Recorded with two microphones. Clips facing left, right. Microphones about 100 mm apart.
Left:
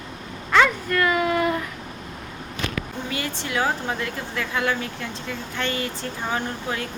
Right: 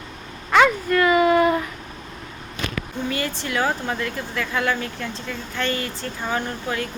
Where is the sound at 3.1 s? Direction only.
20° left (ahead or behind).